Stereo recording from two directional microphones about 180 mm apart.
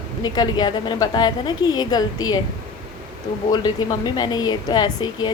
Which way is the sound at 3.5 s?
25° left (ahead or behind).